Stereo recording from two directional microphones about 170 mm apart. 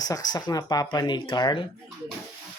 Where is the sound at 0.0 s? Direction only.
20° left (ahead or behind).